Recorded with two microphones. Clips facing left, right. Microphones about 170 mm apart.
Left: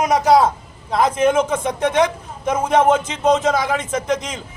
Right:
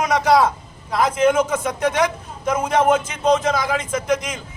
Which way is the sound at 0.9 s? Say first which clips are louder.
Left 1 dB; 25° left (ahead or behind).